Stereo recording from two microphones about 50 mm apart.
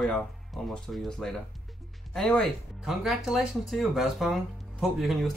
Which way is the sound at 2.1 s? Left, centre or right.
Left.